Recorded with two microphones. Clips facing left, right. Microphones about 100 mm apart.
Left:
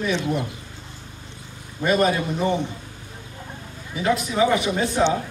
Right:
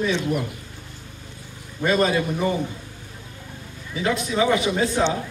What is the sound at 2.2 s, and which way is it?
Speech, 25° left (ahead or behind).